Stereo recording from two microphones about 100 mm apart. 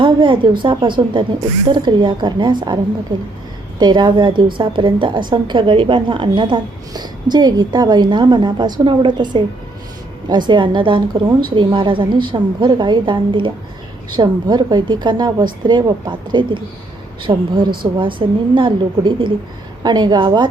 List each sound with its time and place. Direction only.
0.0 s a woman's voice: 55° right (ahead or behind)
3.8 s a woman's voice: 45° right (ahead or behind)
14.2 s a woman's voice: 45° right (ahead or behind)